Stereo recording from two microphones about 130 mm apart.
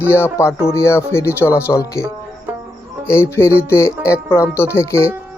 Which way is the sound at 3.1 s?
20° left (ahead or behind).